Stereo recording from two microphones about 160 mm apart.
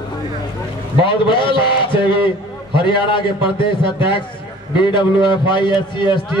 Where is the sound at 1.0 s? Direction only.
30° left (ahead or behind).